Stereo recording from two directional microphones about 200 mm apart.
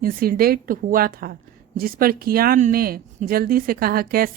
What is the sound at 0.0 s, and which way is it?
A woman's voice, 50° right (ahead or behind).